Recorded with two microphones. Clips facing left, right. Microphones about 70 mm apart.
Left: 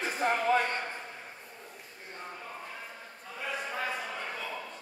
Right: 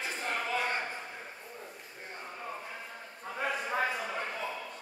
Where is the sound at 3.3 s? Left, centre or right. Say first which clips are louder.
Right 3 dB; right.